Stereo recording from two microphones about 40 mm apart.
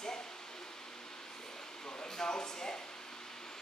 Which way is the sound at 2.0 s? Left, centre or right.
Centre.